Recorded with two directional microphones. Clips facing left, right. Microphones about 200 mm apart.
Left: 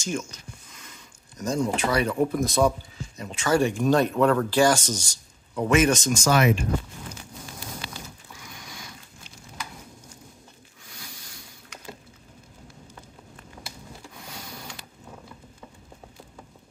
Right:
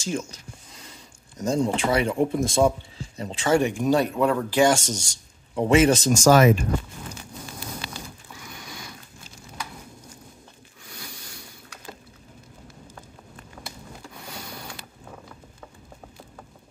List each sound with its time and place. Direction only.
0.0 s speech: 30° right (ahead or behind)
0.7 s a sound: 30° right (ahead or behind)
1.8 s a man's voice: 25° right (ahead or behind); by 6.5 s 45° right (ahead or behind)